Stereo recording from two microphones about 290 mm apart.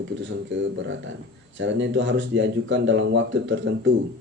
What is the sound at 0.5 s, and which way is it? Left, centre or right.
Speech, right.